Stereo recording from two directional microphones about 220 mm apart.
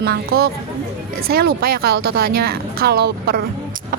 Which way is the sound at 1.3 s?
45° right (ahead or behind).